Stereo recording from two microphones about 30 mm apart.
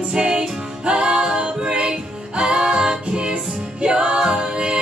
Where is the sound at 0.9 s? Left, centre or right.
Right.